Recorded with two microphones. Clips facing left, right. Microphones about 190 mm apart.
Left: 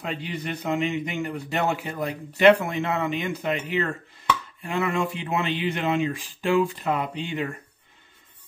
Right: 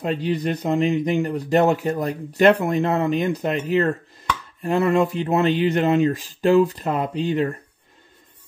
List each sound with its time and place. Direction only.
0.0 s speech: 40° right (ahead or behind)